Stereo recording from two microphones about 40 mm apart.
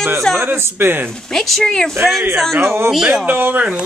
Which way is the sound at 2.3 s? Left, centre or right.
Centre.